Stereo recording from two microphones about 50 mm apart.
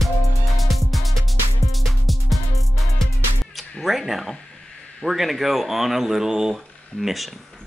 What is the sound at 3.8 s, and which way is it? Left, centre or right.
Speech, centre.